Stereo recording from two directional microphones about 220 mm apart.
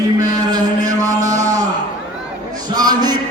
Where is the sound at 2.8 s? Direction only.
20° right (ahead or behind).